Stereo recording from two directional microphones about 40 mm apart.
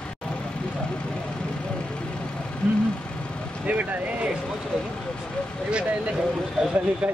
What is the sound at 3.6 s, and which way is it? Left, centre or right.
Speech, right.